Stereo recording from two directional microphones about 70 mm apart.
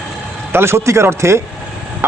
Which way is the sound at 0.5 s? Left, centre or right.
Right.